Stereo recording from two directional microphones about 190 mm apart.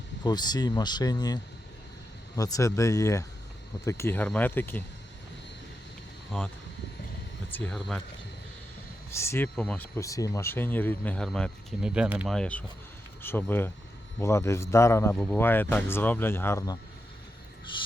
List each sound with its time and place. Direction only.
0.3 s speech: 20° left (ahead or behind)
6.3 s speech: 5° left (ahead or behind)
7.5 s speech: 5° left (ahead or behind)
9.0 s speech: 15° left (ahead or behind); by 12.4 s 5° right (ahead or behind)
12.4 s speech: 5° left (ahead or behind)
17.7 s speech: 25° left (ahead or behind)